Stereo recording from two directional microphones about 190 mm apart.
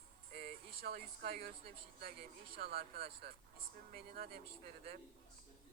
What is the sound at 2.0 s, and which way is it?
Speech, 55° right (ahead or behind).